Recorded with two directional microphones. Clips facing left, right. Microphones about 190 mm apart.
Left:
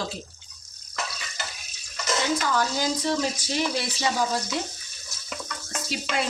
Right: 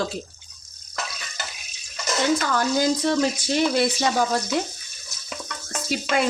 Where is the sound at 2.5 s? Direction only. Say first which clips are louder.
Right 4 dB; 55° right (ahead or behind).